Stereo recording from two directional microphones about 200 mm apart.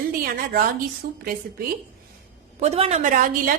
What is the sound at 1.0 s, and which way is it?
Speech, 50° right (ahead or behind).